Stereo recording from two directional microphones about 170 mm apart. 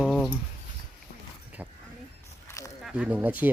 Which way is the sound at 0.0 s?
5° right (ahead or behind).